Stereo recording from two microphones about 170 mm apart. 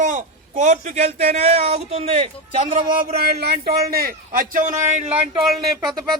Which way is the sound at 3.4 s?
65° right (ahead or behind).